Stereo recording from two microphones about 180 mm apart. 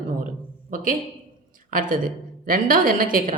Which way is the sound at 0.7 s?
50° right (ahead or behind).